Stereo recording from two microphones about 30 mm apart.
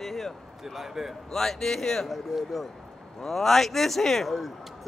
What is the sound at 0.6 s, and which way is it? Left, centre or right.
Speech, centre.